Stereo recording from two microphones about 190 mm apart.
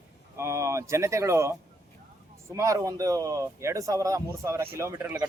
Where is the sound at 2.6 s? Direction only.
15° right (ahead or behind).